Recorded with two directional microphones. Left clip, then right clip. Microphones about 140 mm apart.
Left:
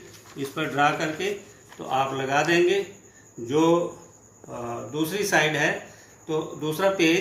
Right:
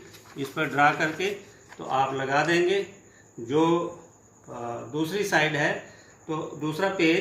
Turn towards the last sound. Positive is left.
turn(degrees=-15)  # may be behind; listen again after turning